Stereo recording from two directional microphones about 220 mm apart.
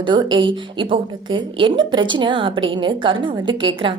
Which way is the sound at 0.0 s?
20° right (ahead or behind).